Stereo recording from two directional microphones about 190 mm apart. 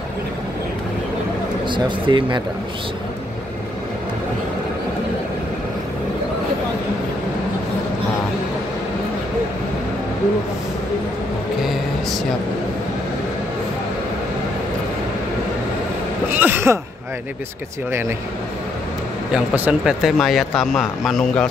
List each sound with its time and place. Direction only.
1.7 s speech: 25° right (ahead or behind)
16.3 s speech: 10° right (ahead or behind)
19.3 s speech: 5° right (ahead or behind)